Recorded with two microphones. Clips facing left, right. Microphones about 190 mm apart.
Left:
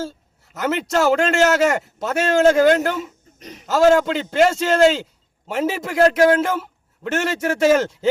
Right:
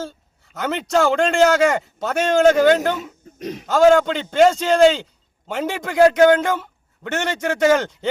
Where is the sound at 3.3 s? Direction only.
65° right (ahead or behind).